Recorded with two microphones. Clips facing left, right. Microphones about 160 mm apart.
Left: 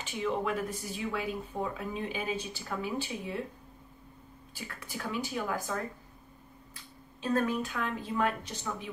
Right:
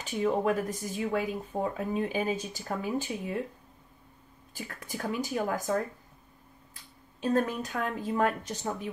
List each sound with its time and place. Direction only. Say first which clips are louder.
0.0 s speech: right 5 dB; 45° right (ahead or behind)
4.6 s speech: right 4 dB; 45° right (ahead or behind)
7.2 s speech: right 2 dB; 40° right (ahead or behind)